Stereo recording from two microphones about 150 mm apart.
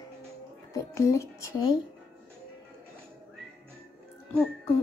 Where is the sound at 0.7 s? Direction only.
20° left (ahead or behind).